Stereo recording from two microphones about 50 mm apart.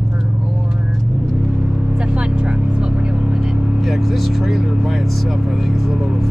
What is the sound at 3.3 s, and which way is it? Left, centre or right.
Vehicle, centre.